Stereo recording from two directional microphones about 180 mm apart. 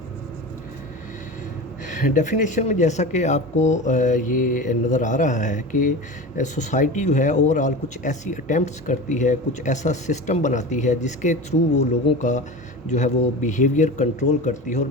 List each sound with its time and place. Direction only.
1.9 s a man's voice: 45° left (ahead or behind)